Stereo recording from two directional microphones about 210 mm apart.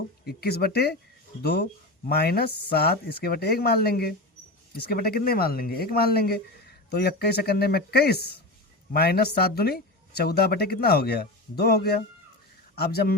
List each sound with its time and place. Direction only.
0.3 s speech: 50° left (ahead or behind)